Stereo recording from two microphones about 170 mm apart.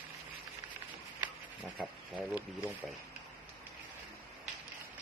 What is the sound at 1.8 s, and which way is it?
Speech, 10° right (ahead or behind).